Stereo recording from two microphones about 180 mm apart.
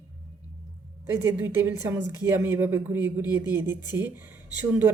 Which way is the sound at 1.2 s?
15° right (ahead or behind).